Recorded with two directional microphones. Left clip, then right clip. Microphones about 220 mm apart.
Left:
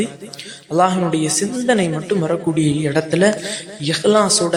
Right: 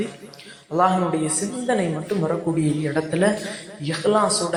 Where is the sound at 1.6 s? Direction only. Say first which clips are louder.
Left 5 dB; 45° left (ahead or behind).